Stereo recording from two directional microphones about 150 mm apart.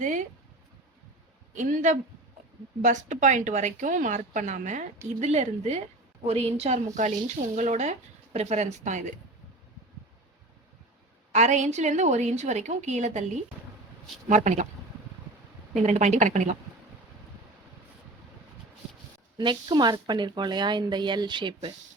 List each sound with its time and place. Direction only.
0.0 s speech: 55° right (ahead or behind)
1.5 s speech: 55° right (ahead or behind)
6.9 s speech: 55° right (ahead or behind)
11.3 s speech: 50° right (ahead or behind)
14.3 s speech: 55° right (ahead or behind)
15.7 s speech: 50° right (ahead or behind)
19.4 s speech: 30° right (ahead or behind)